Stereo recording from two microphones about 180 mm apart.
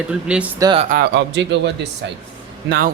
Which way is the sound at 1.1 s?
80° right.